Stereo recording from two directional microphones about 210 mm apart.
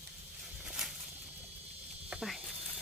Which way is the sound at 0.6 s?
Centre (ahead or behind).